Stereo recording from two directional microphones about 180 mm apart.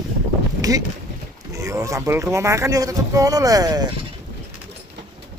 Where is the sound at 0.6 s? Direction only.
20° right (ahead or behind).